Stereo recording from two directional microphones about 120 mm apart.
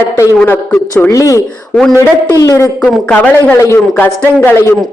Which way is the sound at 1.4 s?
5° left (ahead or behind).